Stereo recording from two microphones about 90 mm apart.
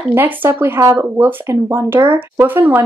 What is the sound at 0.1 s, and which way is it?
Speech, 20° right (ahead or behind).